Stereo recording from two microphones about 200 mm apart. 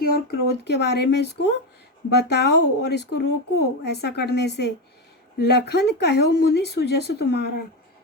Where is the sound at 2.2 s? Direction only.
55° left (ahead or behind).